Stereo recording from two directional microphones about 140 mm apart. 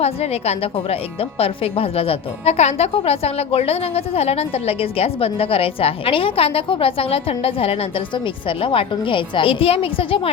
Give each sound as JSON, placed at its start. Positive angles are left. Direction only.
{"t": 0.0, "sound": "speech", "side_deg": 45}